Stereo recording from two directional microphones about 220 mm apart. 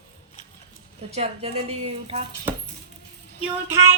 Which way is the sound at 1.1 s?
30° right (ahead or behind).